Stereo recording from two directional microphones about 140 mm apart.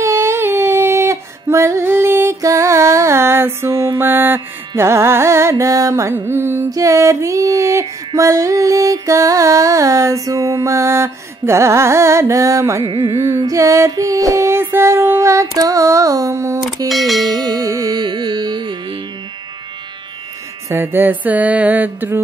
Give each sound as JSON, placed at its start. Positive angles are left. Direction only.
{"t": 0.0, "sound": "music", "side_deg": -20}
{"t": 4.0, "sound": "carnatic music", "side_deg": -15}
{"t": 12.8, "sound": "carnatic music", "side_deg": -40}
{"t": 13.1, "sound": "carnatic music", "side_deg": -20}
{"t": 13.4, "sound": "female singing", "side_deg": -25}
{"t": 16.9, "sound": "speech", "side_deg": 0}
{"t": 17.3, "sound": "carnatic music", "side_deg": -25}
{"t": 20.6, "sound": "music", "side_deg": -15}